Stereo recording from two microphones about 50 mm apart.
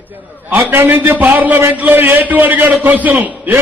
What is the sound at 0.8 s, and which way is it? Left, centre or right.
A man's voice, right.